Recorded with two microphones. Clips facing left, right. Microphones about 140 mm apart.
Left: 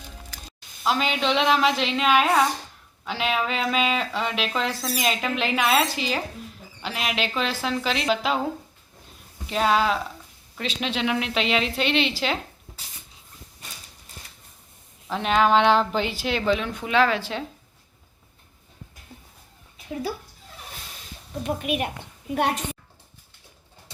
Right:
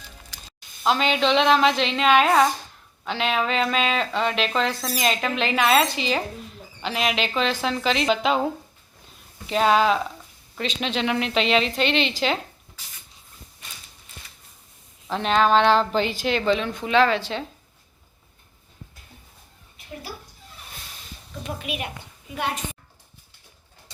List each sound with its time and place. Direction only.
0.9 s speech: 5° left (ahead or behind)
9.5 s speech: centre (ahead or behind)
15.0 s a woman's voice: 5° left (ahead or behind)
21.4 s a woman's voice: 50° left (ahead or behind)
22.4 s a child's voice: 65° left (ahead or behind)